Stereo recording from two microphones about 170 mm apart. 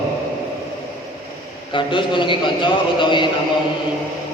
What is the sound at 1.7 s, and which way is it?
A man's voice, 30° left (ahead or behind).